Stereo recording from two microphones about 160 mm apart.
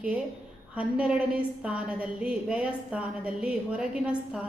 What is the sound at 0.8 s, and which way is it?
A woman's voice, 10° right (ahead or behind).